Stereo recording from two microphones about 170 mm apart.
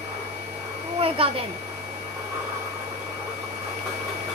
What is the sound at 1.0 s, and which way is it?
Speech, 35° right (ahead or behind).